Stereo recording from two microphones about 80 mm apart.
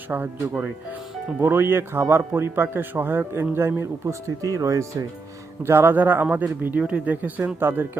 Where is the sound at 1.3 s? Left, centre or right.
Right.